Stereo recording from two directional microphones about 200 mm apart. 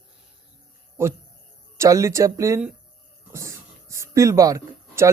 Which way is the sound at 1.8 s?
15° right (ahead or behind).